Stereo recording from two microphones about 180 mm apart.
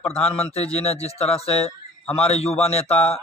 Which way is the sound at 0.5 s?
35° left (ahead or behind).